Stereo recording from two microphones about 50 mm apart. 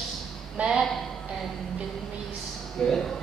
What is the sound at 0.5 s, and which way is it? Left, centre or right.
Speech, centre.